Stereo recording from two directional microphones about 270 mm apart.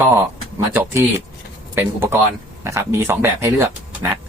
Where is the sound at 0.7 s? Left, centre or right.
Centre.